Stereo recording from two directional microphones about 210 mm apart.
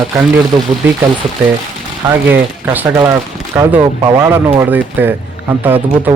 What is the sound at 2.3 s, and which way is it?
Speech, 10° right (ahead or behind).